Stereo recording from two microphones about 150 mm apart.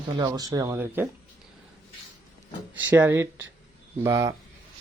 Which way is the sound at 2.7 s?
15° right (ahead or behind).